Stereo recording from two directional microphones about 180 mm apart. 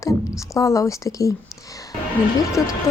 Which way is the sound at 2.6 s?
15° left (ahead or behind).